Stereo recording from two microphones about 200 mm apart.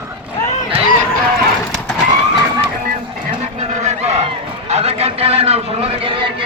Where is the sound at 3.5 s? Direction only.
35° right (ahead or behind).